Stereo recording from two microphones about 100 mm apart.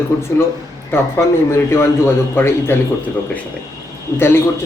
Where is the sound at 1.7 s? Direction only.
25° left (ahead or behind).